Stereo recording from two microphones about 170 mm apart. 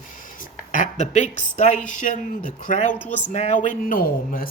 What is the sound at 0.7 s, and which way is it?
Speech, 45° left (ahead or behind).